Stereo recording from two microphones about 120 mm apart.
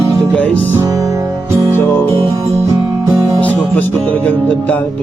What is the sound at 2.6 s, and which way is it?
Music, 30° right (ahead or behind).